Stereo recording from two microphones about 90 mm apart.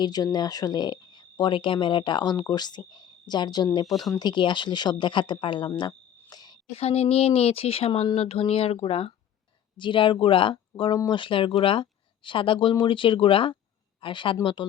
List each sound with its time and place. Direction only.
0.0 s speech: 50° left (ahead or behind)
4.2 s speech: 60° left (ahead or behind)
6.3 s a sound: 50° left (ahead or behind)
6.7 s speech: 90° left
9.7 s speech: 65° left (ahead or behind); by 13.6 s 85° left
14.0 s speech: 70° left (ahead or behind)